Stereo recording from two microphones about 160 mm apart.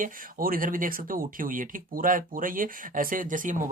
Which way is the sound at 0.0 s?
60° right (ahead or behind).